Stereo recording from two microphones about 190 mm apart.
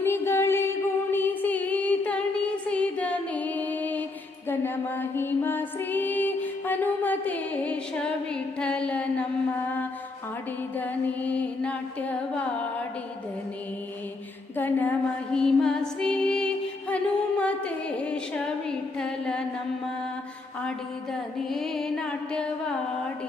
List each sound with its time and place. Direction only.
0.0 s music: 15° left (ahead or behind)
1.1 s a sound: 10° left (ahead or behind)
4.4 s mantra: 10° left (ahead or behind)
10.8 s mantra: 10° left (ahead or behind)
14.5 s music: 10° left (ahead or behind)
20.6 s music: 5° left (ahead or behind)